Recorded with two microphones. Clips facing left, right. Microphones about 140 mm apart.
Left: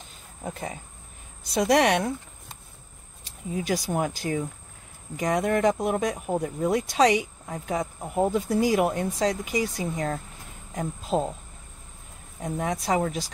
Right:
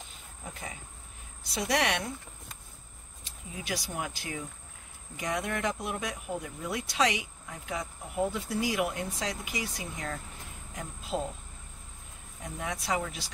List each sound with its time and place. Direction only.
0.4 s speech: 45° left (ahead or behind)
3.6 s speech: 45° left (ahead or behind)
12.4 s speech: 45° left (ahead or behind)